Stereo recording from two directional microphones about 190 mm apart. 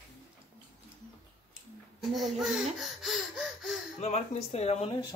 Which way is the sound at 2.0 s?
Centre (ahead or behind).